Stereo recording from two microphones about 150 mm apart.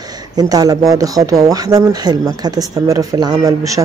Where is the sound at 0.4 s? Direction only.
25° right (ahead or behind).